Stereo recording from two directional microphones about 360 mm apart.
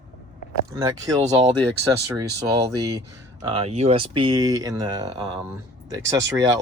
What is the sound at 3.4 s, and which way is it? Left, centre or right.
Speech, centre.